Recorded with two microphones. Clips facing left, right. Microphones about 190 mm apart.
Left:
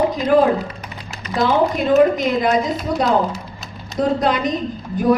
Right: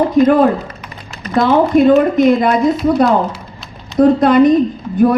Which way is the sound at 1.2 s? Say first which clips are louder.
Right 5 dB; 50° right (ahead or behind).